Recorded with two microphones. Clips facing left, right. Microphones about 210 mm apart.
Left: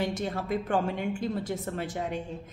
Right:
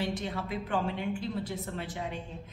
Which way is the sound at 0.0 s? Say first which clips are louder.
Left 3 dB; 45° left (ahead or behind).